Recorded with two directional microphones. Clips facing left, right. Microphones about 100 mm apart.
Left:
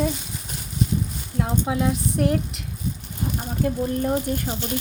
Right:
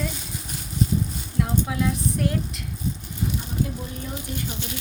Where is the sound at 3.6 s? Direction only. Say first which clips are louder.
Left 9 dB; 60° left (ahead or behind).